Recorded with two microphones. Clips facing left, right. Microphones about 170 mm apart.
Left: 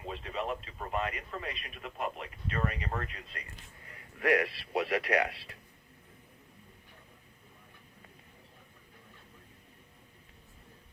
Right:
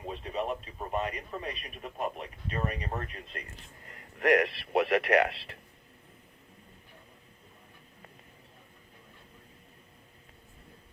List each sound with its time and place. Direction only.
0.0 s radio: 20° right (ahead or behind)
3.8 s speech: 45° right (ahead or behind)